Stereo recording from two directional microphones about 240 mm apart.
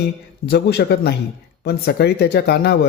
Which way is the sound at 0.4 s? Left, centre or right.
Left.